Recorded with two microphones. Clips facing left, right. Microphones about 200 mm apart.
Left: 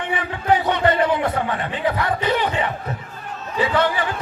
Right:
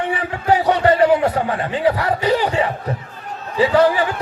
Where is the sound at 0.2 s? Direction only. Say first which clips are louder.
Even; 35° right (ahead or behind).